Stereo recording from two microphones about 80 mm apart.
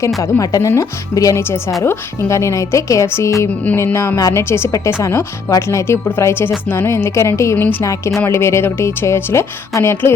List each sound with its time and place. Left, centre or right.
0.2 s speech: left
1.4 s speech: left
7.5 s speech: left